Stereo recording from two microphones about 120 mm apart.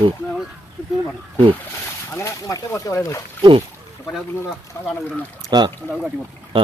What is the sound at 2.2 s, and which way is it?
Speech, 25° left (ahead or behind).